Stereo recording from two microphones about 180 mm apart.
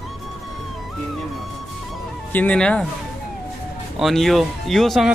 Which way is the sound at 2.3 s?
10° left (ahead or behind).